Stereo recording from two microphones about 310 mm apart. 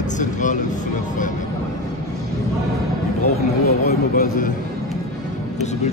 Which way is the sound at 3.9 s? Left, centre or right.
Left.